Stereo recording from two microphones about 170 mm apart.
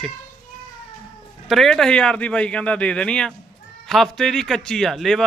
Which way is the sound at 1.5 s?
Centre (ahead or behind).